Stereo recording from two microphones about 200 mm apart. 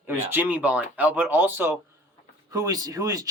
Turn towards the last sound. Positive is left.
turn(degrees=-15)  # may be behind; listen again after turning